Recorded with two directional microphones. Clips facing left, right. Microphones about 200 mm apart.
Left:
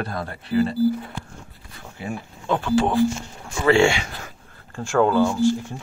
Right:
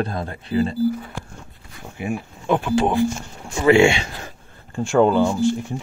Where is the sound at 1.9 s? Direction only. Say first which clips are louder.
Right 5 dB; 15° right (ahead or behind).